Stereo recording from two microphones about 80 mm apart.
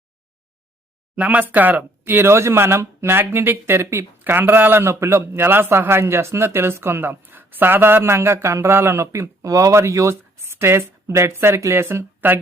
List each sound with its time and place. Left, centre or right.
1.1 s a man's voice: centre